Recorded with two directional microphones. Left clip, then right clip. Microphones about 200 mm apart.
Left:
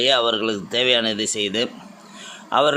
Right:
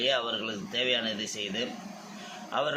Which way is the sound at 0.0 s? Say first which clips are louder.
Left 10 dB; 60° left (ahead or behind).